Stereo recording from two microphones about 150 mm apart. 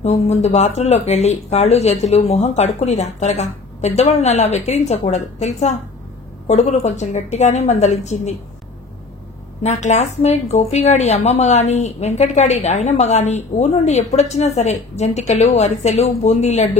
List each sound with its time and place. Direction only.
0.0 s speech: 45° left (ahead or behind)
9.6 s speech: 50° left (ahead or behind)